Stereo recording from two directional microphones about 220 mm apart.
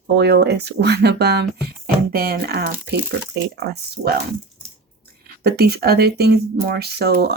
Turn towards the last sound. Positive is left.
turn(degrees=-45)  # may be behind; listen again after turning